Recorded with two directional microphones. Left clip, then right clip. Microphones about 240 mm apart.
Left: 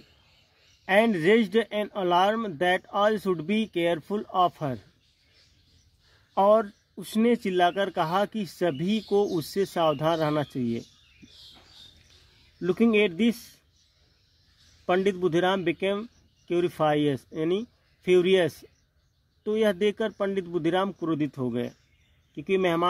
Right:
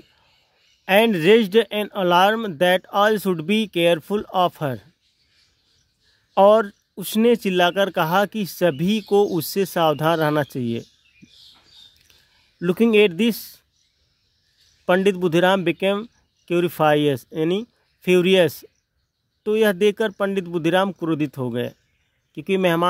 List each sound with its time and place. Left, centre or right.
0.8 s speech: right
6.3 s speech: right
12.5 s speech: right
14.9 s speech: right